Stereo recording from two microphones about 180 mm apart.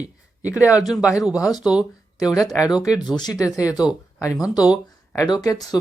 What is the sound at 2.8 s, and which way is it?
Speech, 20° left (ahead or behind).